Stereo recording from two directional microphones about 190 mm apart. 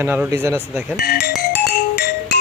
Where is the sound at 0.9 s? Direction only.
60° left (ahead or behind).